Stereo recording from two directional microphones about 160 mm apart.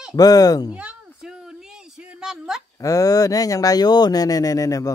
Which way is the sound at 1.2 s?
5° right (ahead or behind).